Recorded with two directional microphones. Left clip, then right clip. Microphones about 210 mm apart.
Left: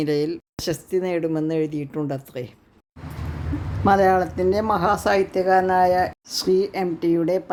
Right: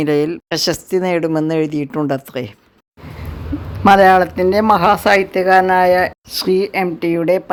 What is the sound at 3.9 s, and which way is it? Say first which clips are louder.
Speech: right 8 dB; 20° right (ahead or behind).